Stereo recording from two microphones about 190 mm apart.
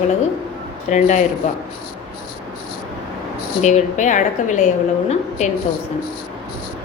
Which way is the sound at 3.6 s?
35° left (ahead or behind).